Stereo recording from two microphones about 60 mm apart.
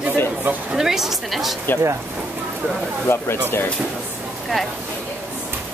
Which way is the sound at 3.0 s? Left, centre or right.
Left.